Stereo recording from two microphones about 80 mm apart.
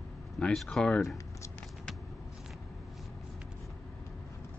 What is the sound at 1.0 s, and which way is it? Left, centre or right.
Speech, left.